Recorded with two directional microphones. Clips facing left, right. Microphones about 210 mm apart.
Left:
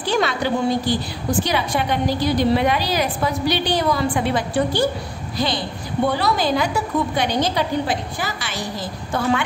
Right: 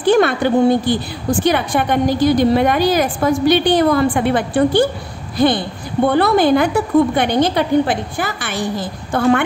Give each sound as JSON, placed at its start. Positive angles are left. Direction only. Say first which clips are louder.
{"t": 0.0, "sound": "a woman's voice", "louder": "right 8 dB", "side_deg": -55}